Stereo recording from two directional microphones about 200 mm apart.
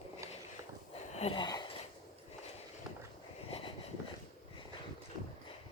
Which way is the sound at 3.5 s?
30° left (ahead or behind).